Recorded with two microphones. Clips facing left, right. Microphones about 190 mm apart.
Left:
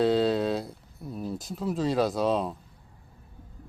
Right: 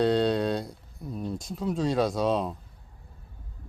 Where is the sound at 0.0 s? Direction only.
Centre (ahead or behind).